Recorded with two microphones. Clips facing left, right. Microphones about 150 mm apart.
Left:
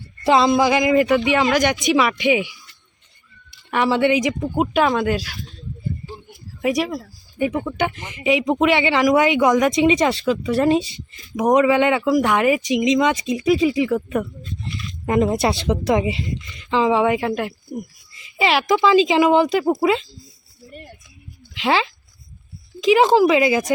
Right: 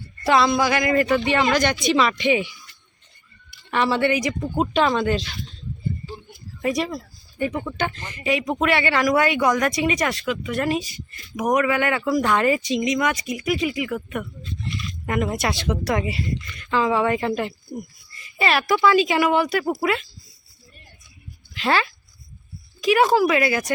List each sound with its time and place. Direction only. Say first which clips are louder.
0.3 s speech: left 3 dB; 20° left (ahead or behind)
3.7 s speech: left 3 dB; 15° left (ahead or behind)
6.6 s speech: left 3 dB; 10° left (ahead or behind)
17.2 s speech: left 1 dB; 5° left (ahead or behind)
18.3 s speech: left 3 dB; 15° left (ahead or behind)
21.6 s speech: left 2 dB; 15° left (ahead or behind)
23.0 s speech: left 3 dB; 20° left (ahead or behind)